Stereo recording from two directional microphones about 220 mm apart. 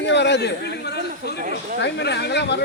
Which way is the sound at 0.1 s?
50° left (ahead or behind).